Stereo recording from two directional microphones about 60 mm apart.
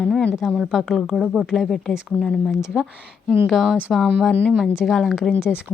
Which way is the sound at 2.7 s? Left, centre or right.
Centre.